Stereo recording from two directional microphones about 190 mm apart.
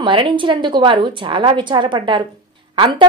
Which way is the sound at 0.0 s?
25° right (ahead or behind).